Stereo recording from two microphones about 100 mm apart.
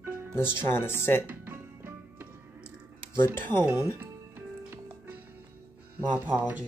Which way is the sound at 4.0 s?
25° right (ahead or behind).